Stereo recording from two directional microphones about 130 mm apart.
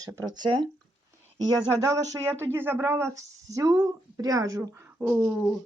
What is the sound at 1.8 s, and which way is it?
Speech, 25° right (ahead or behind).